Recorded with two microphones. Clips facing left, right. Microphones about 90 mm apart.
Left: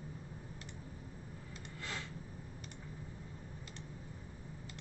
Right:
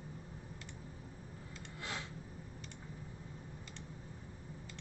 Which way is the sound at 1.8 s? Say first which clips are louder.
Right 1 dB; 15° right (ahead or behind).